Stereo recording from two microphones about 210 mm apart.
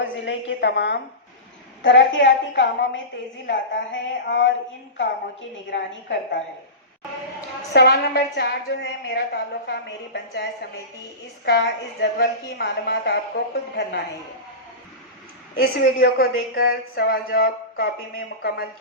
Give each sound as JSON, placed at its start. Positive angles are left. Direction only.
{"t": 0.0, "sound": "a woman's voice", "side_deg": 60}
{"t": 5.7, "sound": "a woman's voice", "side_deg": 60}
{"t": 7.7, "sound": "a woman's voice", "side_deg": 50}
{"t": 11.4, "sound": "a woman's voice", "side_deg": 55}
{"t": 15.5, "sound": "a woman's voice", "side_deg": 45}